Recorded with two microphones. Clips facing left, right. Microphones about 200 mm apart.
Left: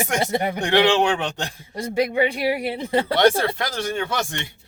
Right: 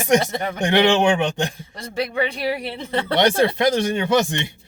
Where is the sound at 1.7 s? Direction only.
10° left (ahead or behind).